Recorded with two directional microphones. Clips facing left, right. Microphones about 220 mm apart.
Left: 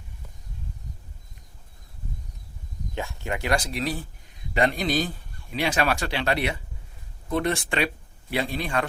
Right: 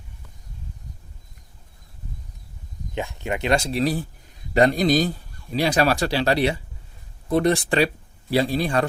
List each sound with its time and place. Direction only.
2.9 s a man's voice: 20° right (ahead or behind); by 8.9 s 35° right (ahead or behind)